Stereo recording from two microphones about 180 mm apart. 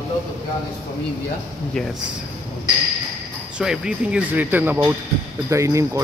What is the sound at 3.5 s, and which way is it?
Speech, 5° right (ahead or behind).